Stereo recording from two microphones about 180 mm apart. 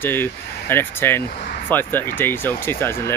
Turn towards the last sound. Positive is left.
turn(degrees=15)  # may be behind; listen again after turning